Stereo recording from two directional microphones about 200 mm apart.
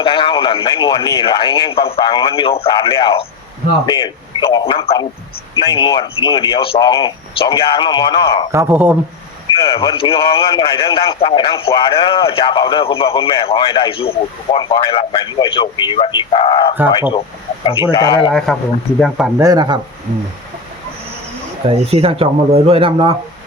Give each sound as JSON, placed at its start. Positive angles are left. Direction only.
{"t": 0.0, "sound": "speech", "side_deg": 25}
{"t": 8.5, "sound": "speech", "side_deg": -10}
{"t": 9.7, "sound": "speech", "side_deg": 25}
{"t": 18.3, "sound": "speech", "side_deg": 0}
{"t": 19.4, "sound": "speech", "side_deg": -20}
{"t": 21.7, "sound": "speech", "side_deg": -30}